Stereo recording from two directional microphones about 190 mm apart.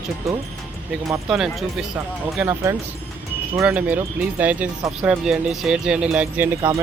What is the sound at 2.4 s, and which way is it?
Speech, 10° right (ahead or behind).